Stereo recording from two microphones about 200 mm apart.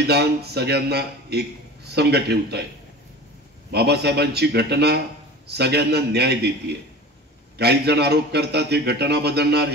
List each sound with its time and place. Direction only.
0.0 s a man's voice: 55° right (ahead or behind)
3.7 s a man's voice: 55° right (ahead or behind)
7.5 s a man's voice: 55° right (ahead or behind)